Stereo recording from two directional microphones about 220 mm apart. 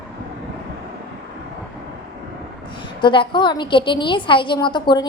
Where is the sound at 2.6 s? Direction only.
20° left (ahead or behind).